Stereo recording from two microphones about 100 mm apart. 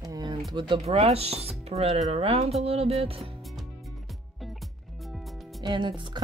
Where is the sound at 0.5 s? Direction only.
55° right (ahead or behind).